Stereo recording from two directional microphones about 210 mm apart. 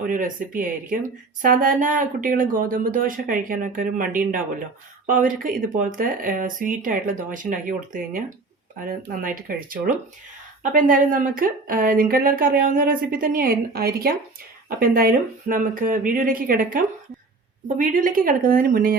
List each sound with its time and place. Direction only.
0.1 s speech: 40° right (ahead or behind)